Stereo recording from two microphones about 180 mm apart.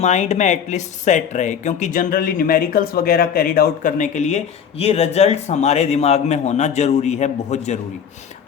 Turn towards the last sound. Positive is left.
turn(degrees=40)  # may be behind; listen again after turning